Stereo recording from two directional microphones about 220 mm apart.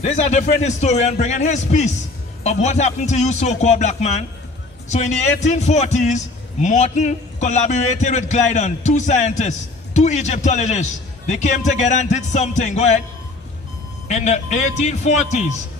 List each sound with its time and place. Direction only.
0.0 s a man's voice: 30° left (ahead or behind)
14.0 s a man's voice: 30° left (ahead or behind)